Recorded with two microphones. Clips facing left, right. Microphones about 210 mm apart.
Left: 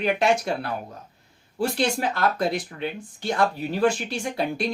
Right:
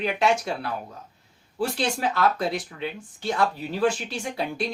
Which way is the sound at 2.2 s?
50° left (ahead or behind).